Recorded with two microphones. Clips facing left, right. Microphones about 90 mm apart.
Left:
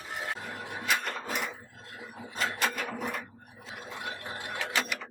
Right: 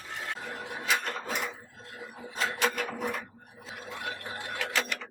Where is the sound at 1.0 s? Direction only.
Centre (ahead or behind).